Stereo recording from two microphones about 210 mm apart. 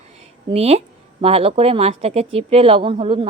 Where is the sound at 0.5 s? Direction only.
30° right (ahead or behind).